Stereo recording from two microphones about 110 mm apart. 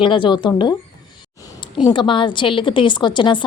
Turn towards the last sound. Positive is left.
turn(degrees=45)  # may be behind; listen again after turning